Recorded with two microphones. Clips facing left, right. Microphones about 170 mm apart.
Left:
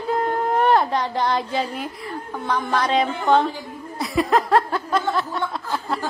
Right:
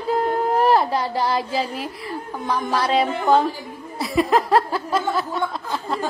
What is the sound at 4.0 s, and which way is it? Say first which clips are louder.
Chuckle: right 1 dB; centre (ahead or behind).